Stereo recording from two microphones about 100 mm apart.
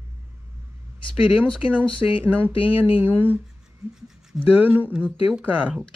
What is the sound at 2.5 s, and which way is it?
Speech, 65° left (ahead or behind).